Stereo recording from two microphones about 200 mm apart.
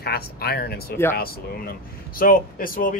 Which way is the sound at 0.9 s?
10° left (ahead or behind).